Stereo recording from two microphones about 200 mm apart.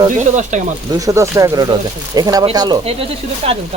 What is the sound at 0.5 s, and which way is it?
Speech, 40° right (ahead or behind).